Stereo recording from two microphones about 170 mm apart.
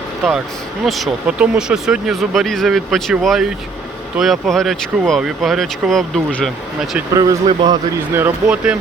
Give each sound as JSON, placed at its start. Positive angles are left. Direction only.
{"t": 0.9, "sound": "speech", "side_deg": 0}
{"t": 7.1, "sound": "a man's voice", "side_deg": -20}
{"t": 8.1, "sound": "speech", "side_deg": -10}